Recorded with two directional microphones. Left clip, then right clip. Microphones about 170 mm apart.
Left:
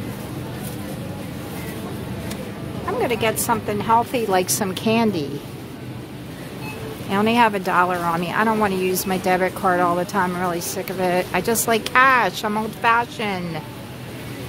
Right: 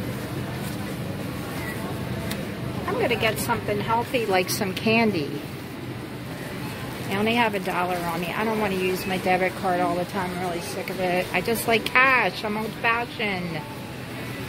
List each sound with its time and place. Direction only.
3.0 s speech: 25° left (ahead or behind)
7.1 s speech: 30° left (ahead or behind)